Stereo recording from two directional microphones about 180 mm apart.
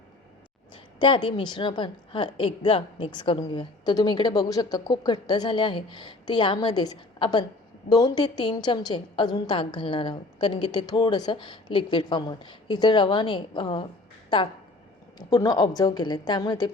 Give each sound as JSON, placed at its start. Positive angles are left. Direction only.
{"t": 0.9, "sound": "a woman's voice", "side_deg": 25}
{"t": 15.3, "sound": "a woman's voice", "side_deg": 20}